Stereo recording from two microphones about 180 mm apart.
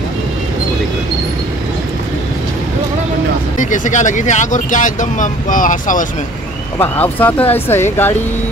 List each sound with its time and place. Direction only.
3.5 s speech: 45° left (ahead or behind)
6.8 s speech: 10° left (ahead or behind)